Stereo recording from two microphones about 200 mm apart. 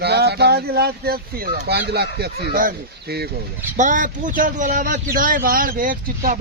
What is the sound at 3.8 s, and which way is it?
Speech, 40° right (ahead or behind).